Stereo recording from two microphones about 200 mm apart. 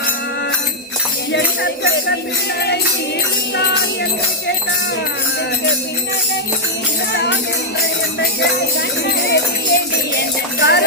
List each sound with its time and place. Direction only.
1.3 s speech: 60° left (ahead or behind)
7.1 s music: 55° left (ahead or behind)
9.3 s music: 55° left (ahead or behind)